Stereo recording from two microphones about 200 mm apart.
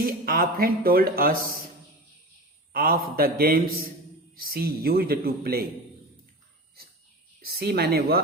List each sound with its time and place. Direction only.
0.0 s speech: 45° right (ahead or behind)
2.7 s speech: 45° right (ahead or behind)
7.3 s speech: 50° right (ahead or behind)